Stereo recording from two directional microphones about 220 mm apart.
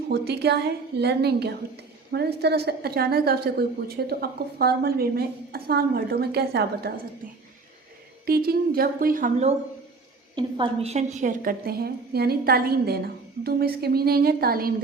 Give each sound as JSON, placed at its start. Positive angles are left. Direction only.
{"t": 0.1, "sound": "a woman's voice", "side_deg": -50}
{"t": 8.3, "sound": "a woman's voice", "side_deg": -45}